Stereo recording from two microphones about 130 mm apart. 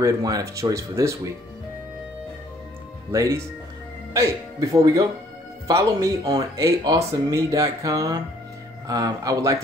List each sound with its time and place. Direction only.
0.0 s speech: 25° right (ahead or behind)
3.1 s speech: 25° right (ahead or behind)